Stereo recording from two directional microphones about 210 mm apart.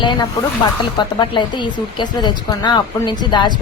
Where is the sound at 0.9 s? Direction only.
20° left (ahead or behind).